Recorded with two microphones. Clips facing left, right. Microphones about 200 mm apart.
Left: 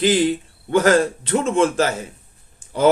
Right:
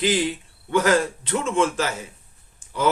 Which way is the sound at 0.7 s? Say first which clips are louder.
Left 4 dB; 45° left (ahead or behind).